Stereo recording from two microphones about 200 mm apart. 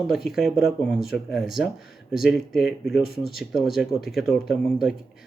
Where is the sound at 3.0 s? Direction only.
50° left (ahead or behind).